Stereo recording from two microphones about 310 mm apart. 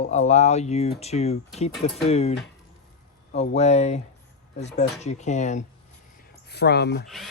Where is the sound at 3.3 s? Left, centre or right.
Left.